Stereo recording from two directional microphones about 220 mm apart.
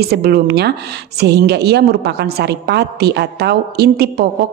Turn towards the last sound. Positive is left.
turn(degrees=-45)  # may be behind; listen again after turning